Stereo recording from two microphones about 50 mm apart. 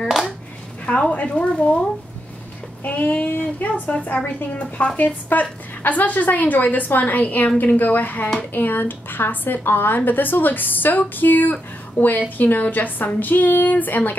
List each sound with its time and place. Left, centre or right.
1.1 s speech: left
2.8 s a woman's voice: left